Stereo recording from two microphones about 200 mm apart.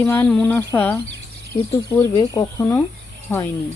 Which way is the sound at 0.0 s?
10° left (ahead or behind).